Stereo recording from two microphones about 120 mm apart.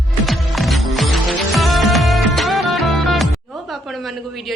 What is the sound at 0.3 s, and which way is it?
Music, centre (ahead or behind).